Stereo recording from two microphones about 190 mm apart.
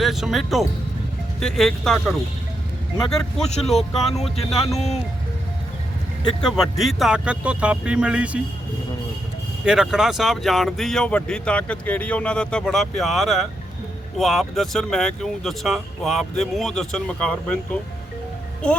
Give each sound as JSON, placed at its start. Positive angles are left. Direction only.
{"t": 0.0, "sound": "speech", "side_deg": 0}
{"t": 3.7, "sound": "speech", "side_deg": 0}
{"t": 4.0, "sound": "speech", "side_deg": 35}
{"t": 6.6, "sound": "speech", "side_deg": 0}
{"t": 9.6, "sound": "speech", "side_deg": 0}